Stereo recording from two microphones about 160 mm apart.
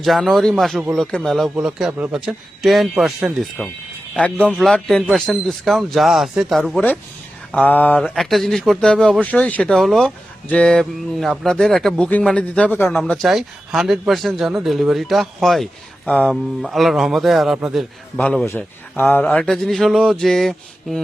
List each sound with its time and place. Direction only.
0.0 s a man's voice: centre (ahead or behind)
13.0 s a man's voice: centre (ahead or behind)